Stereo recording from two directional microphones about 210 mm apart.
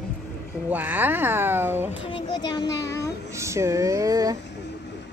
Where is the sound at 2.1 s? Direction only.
20° left (ahead or behind).